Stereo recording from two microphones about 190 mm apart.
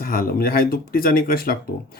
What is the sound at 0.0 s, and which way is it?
Speech, 50° left (ahead or behind).